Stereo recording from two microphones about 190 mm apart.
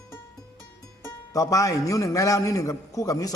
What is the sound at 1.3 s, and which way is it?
A man's voice, 15° left (ahead or behind).